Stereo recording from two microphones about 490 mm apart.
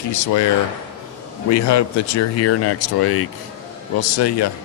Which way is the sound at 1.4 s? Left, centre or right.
Left.